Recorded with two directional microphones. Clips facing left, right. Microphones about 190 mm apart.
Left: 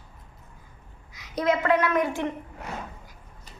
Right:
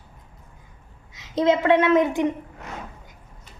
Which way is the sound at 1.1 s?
25° right (ahead or behind).